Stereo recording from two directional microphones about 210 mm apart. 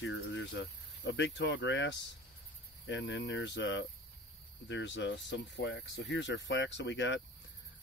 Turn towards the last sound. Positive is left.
turn(degrees=60)  # may be behind; listen again after turning